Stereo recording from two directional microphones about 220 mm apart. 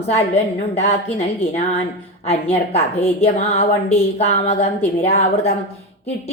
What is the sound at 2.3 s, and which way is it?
Speech, 30° left (ahead or behind).